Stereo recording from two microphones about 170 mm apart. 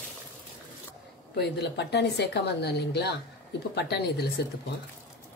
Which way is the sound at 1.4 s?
75° left (ahead or behind).